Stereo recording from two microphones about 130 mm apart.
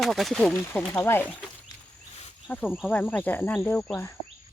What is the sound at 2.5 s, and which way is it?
Speech, 15° left (ahead or behind).